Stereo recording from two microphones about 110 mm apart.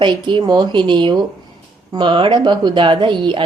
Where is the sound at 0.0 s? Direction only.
45° right (ahead or behind).